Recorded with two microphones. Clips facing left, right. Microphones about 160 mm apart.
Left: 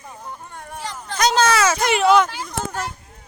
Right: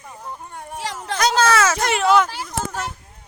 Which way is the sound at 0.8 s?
85° right.